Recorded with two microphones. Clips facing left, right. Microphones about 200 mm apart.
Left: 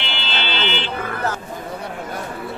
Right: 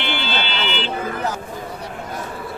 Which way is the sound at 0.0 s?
50° right (ahead or behind).